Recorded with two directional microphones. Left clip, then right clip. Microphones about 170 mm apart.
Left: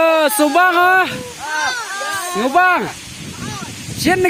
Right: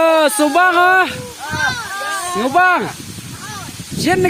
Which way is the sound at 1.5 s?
10° right (ahead or behind).